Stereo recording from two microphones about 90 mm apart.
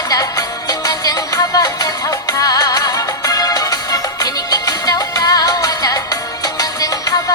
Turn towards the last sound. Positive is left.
turn(degrees=45)  # may be behind; listen again after turning